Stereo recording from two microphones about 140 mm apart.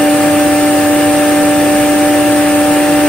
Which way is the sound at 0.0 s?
5° left (ahead or behind).